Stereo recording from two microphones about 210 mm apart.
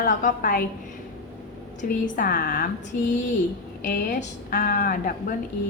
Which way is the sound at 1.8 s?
40° left (ahead or behind).